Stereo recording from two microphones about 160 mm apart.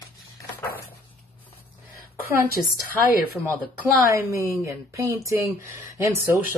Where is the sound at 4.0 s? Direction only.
20° right (ahead or behind).